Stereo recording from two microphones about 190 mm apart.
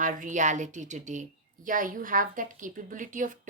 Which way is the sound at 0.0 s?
45° right (ahead or behind).